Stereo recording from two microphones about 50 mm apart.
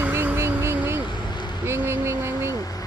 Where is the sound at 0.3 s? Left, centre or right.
Right.